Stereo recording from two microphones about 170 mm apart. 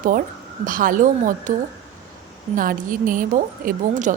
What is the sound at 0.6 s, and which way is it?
Speech, 55° right (ahead or behind).